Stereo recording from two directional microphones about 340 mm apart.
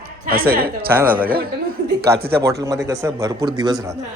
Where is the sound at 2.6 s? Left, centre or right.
Centre.